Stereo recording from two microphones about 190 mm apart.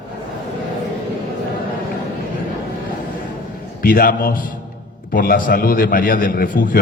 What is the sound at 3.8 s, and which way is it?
A man's voice, 50° left (ahead or behind).